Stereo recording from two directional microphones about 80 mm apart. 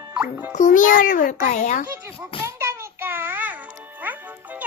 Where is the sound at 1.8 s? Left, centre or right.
Right.